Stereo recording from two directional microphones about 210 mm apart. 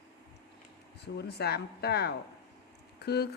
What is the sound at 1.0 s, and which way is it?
Speech, 50° left (ahead or behind).